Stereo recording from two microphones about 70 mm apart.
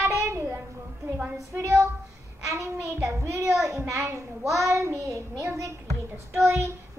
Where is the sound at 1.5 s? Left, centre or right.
Right.